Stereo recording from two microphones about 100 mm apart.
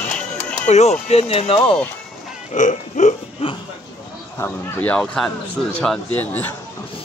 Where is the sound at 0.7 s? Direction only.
90° left; by 1.5 s 75° left (ahead or behind).